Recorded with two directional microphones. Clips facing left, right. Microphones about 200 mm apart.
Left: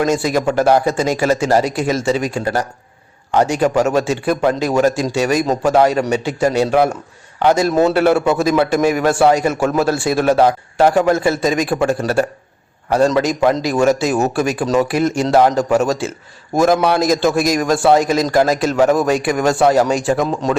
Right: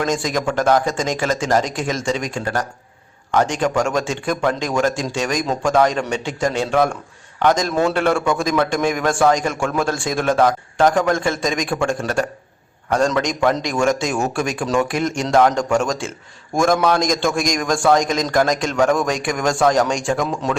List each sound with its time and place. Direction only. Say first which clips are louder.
0.0 s speech: left 5 dB; 5° left (ahead or behind)
7.7 s a man's voice: left 5 dB; 20° left (ahead or behind)
7.9 s a man's voice: left 5 dB; 5° left (ahead or behind)